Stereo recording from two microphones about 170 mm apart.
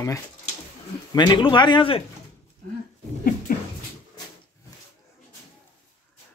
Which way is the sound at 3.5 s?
55° left (ahead or behind).